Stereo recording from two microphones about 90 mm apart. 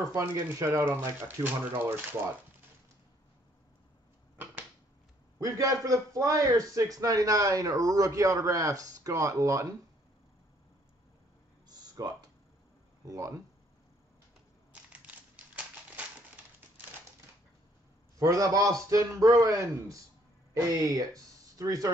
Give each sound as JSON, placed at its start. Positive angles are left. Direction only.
{"t": 0.1, "sound": "a man's voice", "side_deg": -35}
{"t": 5.4, "sound": "a man's voice", "side_deg": -35}
{"t": 11.6, "sound": "a sound", "side_deg": -45}
{"t": 13.0, "sound": "speech", "side_deg": -40}
{"t": 14.7, "sound": "a sound", "side_deg": -15}
{"t": 18.2, "sound": "a man's voice", "side_deg": -40}